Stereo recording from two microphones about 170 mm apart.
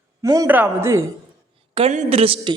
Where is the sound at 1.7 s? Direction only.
40° right (ahead or behind).